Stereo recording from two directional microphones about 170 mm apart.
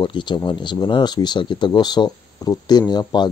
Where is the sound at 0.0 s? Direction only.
30° left (ahead or behind).